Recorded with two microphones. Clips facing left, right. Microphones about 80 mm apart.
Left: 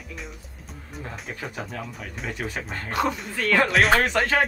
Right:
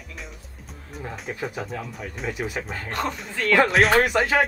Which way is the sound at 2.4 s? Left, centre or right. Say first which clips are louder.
Right 1 dB; centre.